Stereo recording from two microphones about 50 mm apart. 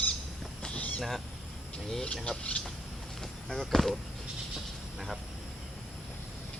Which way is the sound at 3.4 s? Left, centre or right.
Centre.